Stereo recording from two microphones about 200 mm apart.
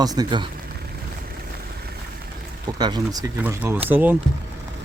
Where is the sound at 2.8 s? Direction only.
20° right (ahead or behind).